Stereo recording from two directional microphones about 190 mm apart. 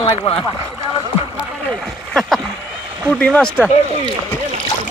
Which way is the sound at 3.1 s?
5° left (ahead or behind).